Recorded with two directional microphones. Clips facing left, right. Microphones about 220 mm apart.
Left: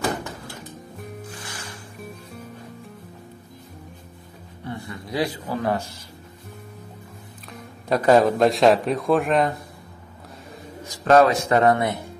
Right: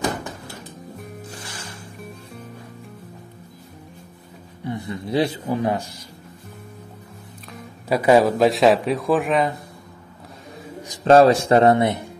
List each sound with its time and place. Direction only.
4.6 s a man's voice: 20° right (ahead or behind)
7.5 s a man's voice: 10° right (ahead or behind)
11.1 s a man's voice: 30° right (ahead or behind)